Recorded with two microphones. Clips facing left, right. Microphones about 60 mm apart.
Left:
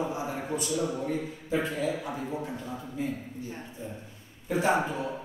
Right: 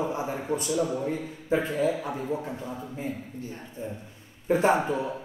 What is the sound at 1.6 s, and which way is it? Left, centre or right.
Speech, right.